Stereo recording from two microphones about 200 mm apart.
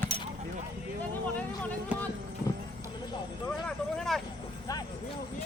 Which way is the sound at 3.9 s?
Centre (ahead or behind).